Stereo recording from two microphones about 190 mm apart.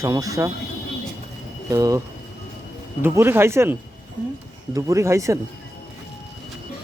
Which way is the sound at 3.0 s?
10° right (ahead or behind).